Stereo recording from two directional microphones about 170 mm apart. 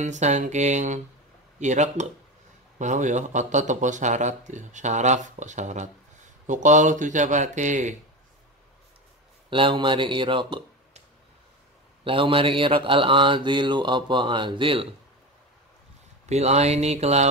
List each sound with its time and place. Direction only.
0.0 s speech: 45° right (ahead or behind)
9.5 s speech: 30° right (ahead or behind)
12.0 s mantra: 30° right (ahead or behind)
16.3 s mantra: 40° right (ahead or behind)